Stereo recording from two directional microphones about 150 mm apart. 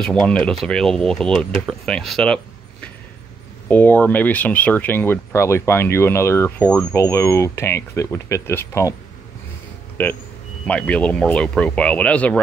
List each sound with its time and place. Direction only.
0.0 s speech: 5° left (ahead or behind)
10.0 s speech: 10° left (ahead or behind)